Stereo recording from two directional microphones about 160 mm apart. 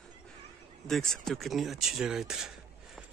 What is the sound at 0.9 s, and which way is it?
Speech, centre (ahead or behind).